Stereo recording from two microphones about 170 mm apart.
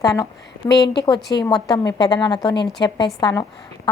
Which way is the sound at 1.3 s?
20° left (ahead or behind).